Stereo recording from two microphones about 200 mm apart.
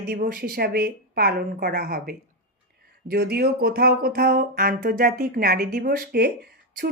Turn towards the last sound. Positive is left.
turn(degrees=-50)  # may be behind; listen again after turning